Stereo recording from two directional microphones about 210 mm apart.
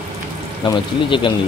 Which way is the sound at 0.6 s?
20° left (ahead or behind).